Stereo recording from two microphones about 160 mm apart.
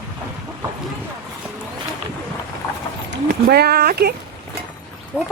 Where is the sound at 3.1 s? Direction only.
80° right.